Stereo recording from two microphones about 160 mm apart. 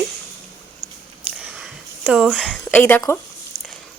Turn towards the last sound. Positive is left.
turn(degrees=10)  # may be behind; listen again after turning